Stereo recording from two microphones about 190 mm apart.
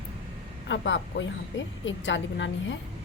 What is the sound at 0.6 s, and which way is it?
Speech, 70° left (ahead or behind).